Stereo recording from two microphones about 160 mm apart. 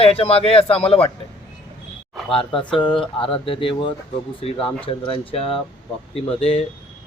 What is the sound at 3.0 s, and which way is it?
Speech, 35° left (ahead or behind).